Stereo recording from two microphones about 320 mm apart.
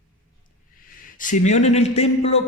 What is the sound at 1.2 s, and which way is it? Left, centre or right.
A man's voice, left.